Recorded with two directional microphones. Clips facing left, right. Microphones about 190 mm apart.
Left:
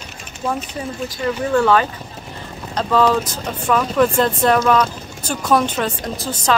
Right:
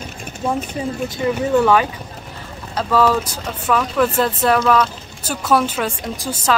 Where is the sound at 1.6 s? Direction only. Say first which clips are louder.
Right 1 dB; 10° right (ahead or behind).